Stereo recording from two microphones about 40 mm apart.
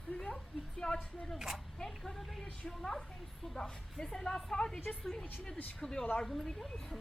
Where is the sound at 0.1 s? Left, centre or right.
Left.